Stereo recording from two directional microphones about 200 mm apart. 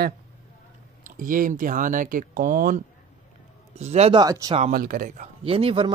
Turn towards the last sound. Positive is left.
turn(degrees=-25)  # may be behind; listen again after turning